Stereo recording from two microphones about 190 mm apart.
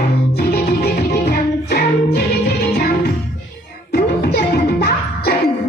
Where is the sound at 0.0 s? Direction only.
55° left (ahead or behind).